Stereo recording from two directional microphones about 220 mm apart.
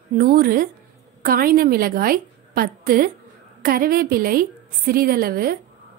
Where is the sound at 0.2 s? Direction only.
40° right (ahead or behind).